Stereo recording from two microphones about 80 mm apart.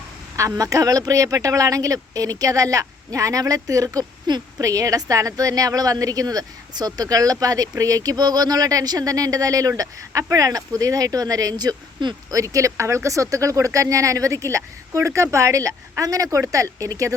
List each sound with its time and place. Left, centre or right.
0.3 s a woman's voice: right
12.3 s speech: right